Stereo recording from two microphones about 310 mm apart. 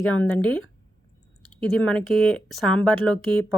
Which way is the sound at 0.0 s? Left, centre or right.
Centre.